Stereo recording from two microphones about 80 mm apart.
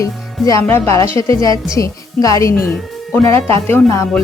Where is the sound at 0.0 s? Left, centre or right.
Left.